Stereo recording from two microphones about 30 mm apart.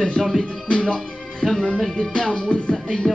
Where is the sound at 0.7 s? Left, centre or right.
Left.